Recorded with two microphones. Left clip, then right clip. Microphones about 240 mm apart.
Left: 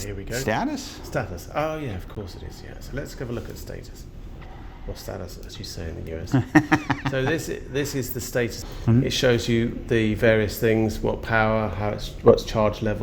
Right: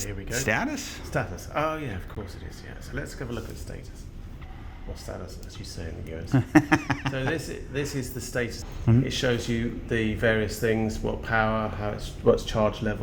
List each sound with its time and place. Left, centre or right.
0.4 s speech: centre
1.1 s speech: left
5.0 s speech: left
6.3 s speech: centre
7.1 s speech: left